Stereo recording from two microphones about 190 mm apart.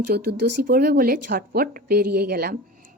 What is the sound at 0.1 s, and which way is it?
A woman's voice, 50° right (ahead or behind).